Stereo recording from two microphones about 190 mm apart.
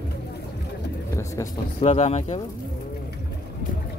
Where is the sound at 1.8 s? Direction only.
35° left (ahead or behind).